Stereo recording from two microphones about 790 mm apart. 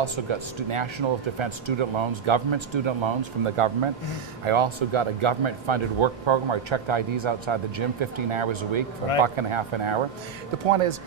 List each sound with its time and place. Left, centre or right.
0.0 s speech: right